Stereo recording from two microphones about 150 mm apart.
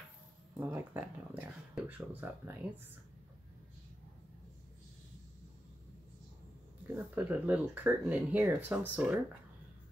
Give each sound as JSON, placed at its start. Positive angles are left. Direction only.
{"t": 0.6, "sound": "speech", "side_deg": -10}
{"t": 7.2, "sound": "speech", "side_deg": -10}